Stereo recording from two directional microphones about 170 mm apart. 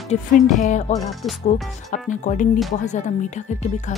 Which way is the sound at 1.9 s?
45° left (ahead or behind).